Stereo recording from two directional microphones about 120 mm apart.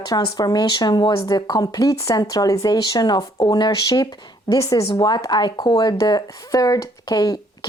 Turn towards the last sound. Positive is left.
turn(degrees=35)  # may be behind; listen again after turning